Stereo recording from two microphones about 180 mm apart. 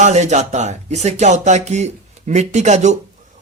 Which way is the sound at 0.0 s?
40° right (ahead or behind).